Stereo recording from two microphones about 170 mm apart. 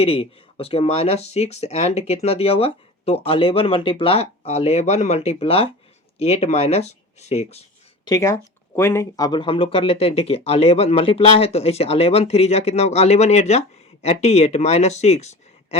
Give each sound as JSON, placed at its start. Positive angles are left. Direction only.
{"t": 0.0, "sound": "speech", "side_deg": 35}
{"t": 8.0, "sound": "speech", "side_deg": 20}